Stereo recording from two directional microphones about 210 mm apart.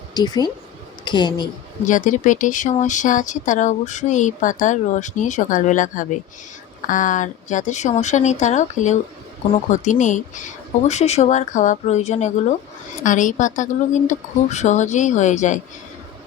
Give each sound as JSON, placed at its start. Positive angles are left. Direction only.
{"t": 0.1, "sound": "speech", "side_deg": 20}
{"t": 1.9, "sound": "speech", "side_deg": 35}